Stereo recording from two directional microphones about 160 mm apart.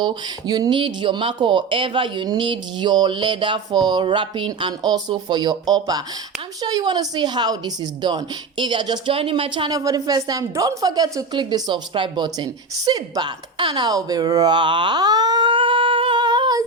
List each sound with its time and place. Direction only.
0.0 s speech: 25° right (ahead or behind)